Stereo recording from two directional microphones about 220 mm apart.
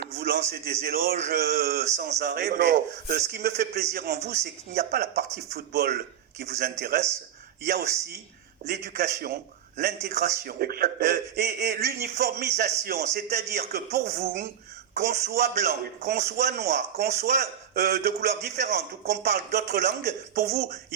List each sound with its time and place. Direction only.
0.2 s a man's voice: 45° right (ahead or behind)